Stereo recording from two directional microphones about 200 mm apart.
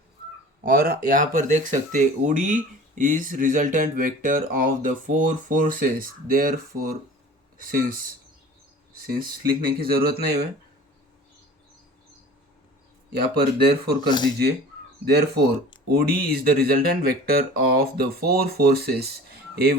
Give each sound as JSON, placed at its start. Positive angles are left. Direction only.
{"t": 0.6, "sound": "speech", "side_deg": -50}
{"t": 9.0, "sound": "speech", "side_deg": -50}
{"t": 13.1, "sound": "speech", "side_deg": -50}
{"t": 15.0, "sound": "speech", "side_deg": -55}